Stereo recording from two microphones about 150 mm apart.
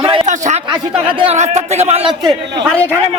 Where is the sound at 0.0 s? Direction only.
35° right (ahead or behind).